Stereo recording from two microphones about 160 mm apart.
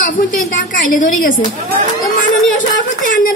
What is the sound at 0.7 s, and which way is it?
Speech, 60° left (ahead or behind).